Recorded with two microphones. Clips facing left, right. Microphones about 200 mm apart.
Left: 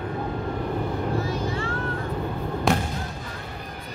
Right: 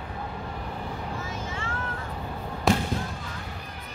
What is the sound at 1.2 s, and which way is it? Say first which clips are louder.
Vehicle: left 8 dB; 35° left (ahead or behind).